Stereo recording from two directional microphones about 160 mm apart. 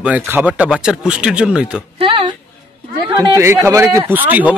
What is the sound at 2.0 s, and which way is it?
Speech, 30° right (ahead or behind).